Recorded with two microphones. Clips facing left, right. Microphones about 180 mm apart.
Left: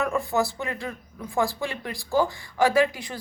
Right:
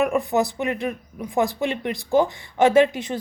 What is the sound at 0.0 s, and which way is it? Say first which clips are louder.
Speech: right 4 dB; 20° right (ahead or behind).